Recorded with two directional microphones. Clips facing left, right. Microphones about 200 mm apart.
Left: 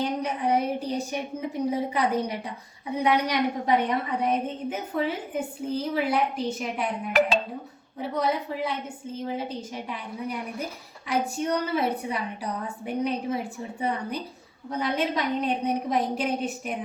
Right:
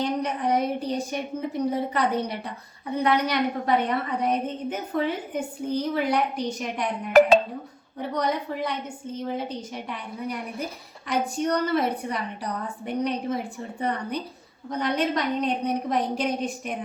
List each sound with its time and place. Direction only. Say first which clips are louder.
0.0 s a woman's voice: right 1 dB; 10° left (ahead or behind)
7.1 s speech: right 7 dB; 45° right (ahead or behind)
8.1 s a woman's voice: even; 5° left (ahead or behind)